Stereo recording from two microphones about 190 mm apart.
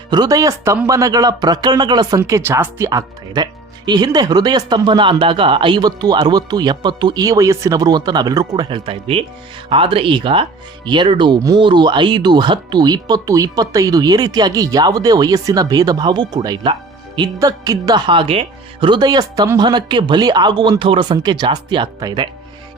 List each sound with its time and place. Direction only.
0.1 s speech: 20° right (ahead or behind)